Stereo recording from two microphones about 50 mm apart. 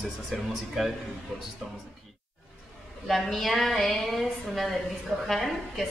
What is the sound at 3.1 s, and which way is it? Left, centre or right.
Speech, centre.